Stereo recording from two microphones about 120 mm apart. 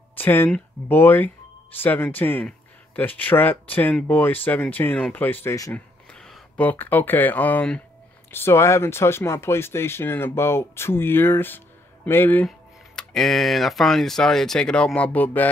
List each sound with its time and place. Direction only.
0.1 s speech: 15° left (ahead or behind)
6.1 s speech: 5° left (ahead or behind)
12.4 s speech: 5° left (ahead or behind)